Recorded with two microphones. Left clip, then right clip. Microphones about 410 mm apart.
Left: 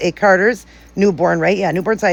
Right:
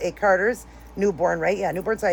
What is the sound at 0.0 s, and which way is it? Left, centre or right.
A man's voice, left.